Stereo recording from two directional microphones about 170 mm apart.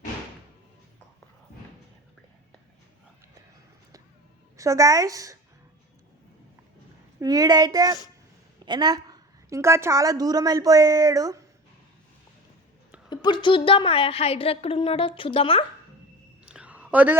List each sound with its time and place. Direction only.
4.5 s a woman's voice: 20° right (ahead or behind)
7.2 s a woman's voice: 20° right (ahead or behind)
13.1 s a woman's voice: 25° left (ahead or behind)
16.5 s a sound: 5° right (ahead or behind)